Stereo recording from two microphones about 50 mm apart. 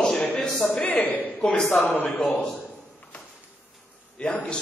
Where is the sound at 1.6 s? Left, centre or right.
Centre.